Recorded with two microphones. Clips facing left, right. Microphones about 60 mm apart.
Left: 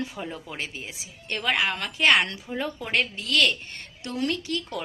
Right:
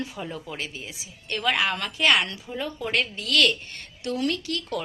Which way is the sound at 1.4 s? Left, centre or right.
Centre.